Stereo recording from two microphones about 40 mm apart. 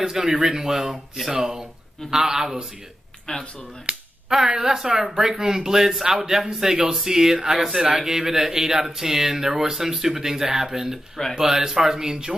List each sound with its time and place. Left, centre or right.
0.0 s speech: centre
3.3 s speech: left
3.9 s speech: right
4.3 s speech: centre